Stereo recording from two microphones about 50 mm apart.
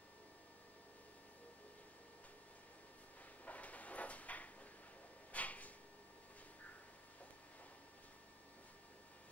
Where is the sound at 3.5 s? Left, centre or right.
Left.